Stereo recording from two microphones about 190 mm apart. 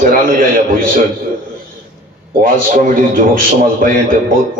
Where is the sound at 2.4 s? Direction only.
45° right (ahead or behind).